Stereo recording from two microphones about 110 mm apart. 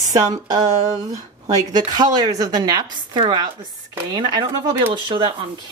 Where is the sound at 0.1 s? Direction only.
35° right (ahead or behind).